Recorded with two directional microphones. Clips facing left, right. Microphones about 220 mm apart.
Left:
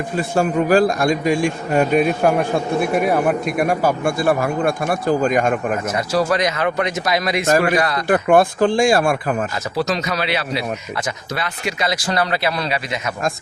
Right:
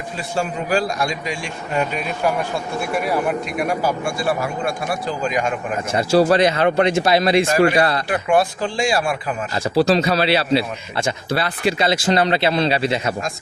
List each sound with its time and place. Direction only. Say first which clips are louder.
0.2 s speech: left 6 dB; 50° left (ahead or behind)
5.9 s speech: right 6 dB; 30° right (ahead or behind)
8.0 s speech: left 4 dB; 50° left (ahead or behind)
9.7 s speech: right 6 dB; 30° right (ahead or behind)